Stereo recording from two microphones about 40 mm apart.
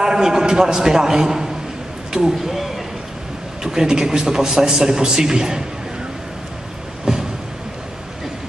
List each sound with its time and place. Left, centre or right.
0.0 s a man's voice: centre
2.1 s a sound: centre
3.6 s a man's voice: centre
7.1 s vehicle: centre